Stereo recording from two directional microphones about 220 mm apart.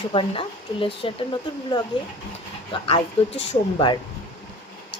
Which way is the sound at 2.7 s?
25° left (ahead or behind).